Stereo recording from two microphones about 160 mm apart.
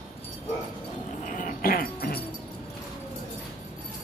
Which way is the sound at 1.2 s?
55° left (ahead or behind).